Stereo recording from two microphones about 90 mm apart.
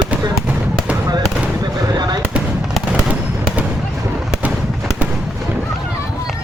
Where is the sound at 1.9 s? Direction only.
50° right (ahead or behind).